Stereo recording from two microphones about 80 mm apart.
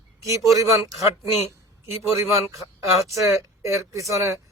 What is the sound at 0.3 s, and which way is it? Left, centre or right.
A man's voice, right.